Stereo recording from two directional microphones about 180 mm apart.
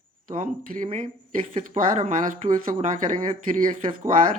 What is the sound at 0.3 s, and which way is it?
Speech, 45° right (ahead or behind).